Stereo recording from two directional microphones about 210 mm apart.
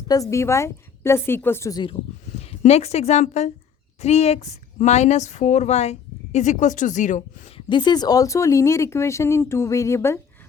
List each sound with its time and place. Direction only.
0.1 s a woman's voice: 15° left (ahead or behind); by 7.6 s 35° left (ahead or behind)
7.7 s speech: 20° left (ahead or behind)